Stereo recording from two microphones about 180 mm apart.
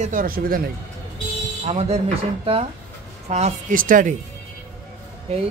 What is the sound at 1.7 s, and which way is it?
Speech, 35° right (ahead or behind).